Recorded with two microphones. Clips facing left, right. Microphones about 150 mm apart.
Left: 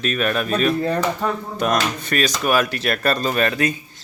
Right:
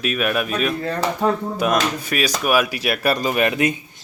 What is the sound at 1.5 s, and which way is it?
Speech, 5° right (ahead or behind).